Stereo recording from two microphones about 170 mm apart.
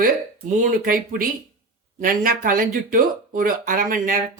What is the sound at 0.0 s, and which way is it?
Speech, 50° right (ahead or behind).